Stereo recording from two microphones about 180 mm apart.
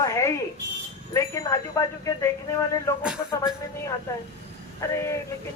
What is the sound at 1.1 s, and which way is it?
Speech, 20° left (ahead or behind).